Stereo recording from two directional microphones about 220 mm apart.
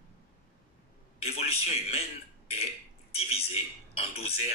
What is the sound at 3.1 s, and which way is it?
A man's voice, 25° left (ahead or behind).